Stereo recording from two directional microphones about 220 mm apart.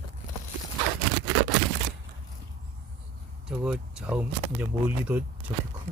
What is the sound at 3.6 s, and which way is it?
Speech, 5° right (ahead or behind).